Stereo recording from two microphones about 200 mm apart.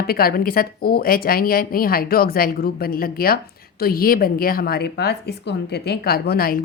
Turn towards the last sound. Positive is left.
turn(degrees=50)  # may be behind; listen again after turning